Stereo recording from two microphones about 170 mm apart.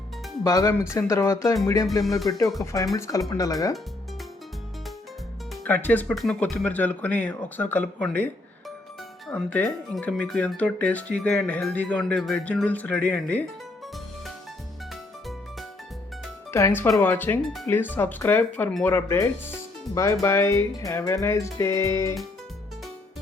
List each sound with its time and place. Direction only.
0.4 s speech: 20° left (ahead or behind)
2.0 s speech: centre (ahead or behind)
2.7 s speech: 20° left (ahead or behind)
5.6 s speech: 10° left (ahead or behind)
16.5 s speech: 15° left (ahead or behind)